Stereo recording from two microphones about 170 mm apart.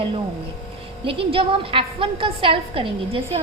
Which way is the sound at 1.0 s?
30° right (ahead or behind).